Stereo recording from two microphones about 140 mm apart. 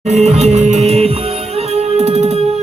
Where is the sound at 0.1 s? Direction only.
50° right (ahead or behind).